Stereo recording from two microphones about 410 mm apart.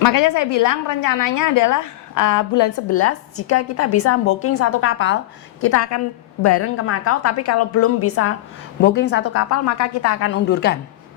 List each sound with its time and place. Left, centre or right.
0.0 s a woman's voice: left
2.9 s a woman's voice: left
5.5 s a woman's voice: left